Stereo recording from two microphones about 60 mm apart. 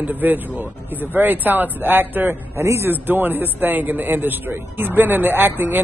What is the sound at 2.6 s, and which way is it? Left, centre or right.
Speech, right.